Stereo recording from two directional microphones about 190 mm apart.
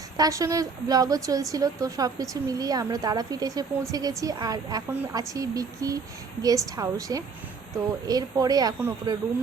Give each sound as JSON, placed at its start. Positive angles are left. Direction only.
{"t": 0.2, "sound": "a woman's voice", "side_deg": -15}